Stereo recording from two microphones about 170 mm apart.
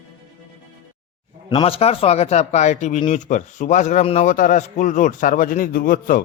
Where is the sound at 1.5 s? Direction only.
30° left (ahead or behind).